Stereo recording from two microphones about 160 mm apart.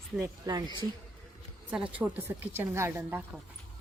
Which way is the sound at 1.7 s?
10° right (ahead or behind).